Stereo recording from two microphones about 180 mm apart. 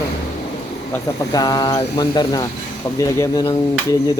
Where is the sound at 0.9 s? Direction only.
20° left (ahead or behind).